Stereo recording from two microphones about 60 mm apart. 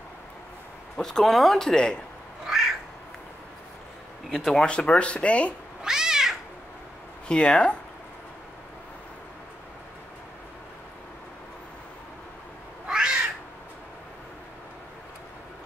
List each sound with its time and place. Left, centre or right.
1.0 s speech: centre
2.4 s cat: centre
4.6 s speech: centre
5.8 s cat: centre
7.2 s speech: centre
12.8 s cat: centre